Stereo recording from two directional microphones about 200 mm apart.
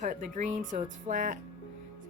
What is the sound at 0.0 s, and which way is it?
Speech, 40° right (ahead or behind).